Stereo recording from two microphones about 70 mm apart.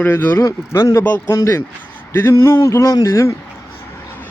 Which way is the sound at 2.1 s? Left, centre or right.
Left.